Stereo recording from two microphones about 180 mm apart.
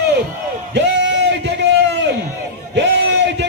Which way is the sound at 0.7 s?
75° right (ahead or behind).